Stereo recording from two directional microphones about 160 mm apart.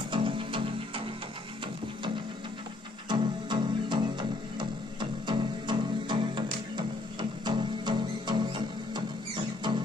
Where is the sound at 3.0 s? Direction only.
30° right (ahead or behind).